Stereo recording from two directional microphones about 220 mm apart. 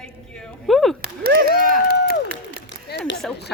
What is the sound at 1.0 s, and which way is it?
Speech, 45° right (ahead or behind).